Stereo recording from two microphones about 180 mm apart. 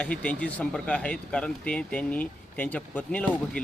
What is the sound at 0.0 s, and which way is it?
Speech, 5° left (ahead or behind).